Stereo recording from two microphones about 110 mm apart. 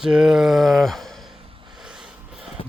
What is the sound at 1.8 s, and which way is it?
Snort, 5° right (ahead or behind).